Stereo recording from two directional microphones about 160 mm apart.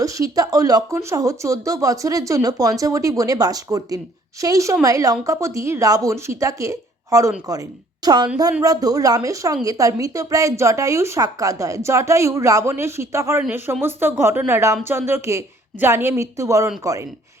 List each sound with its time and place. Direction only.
0.0 s a woman's voice: 20° right (ahead or behind)